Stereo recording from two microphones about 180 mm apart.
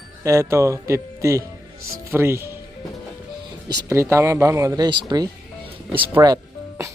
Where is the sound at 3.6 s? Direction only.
15° right (ahead or behind).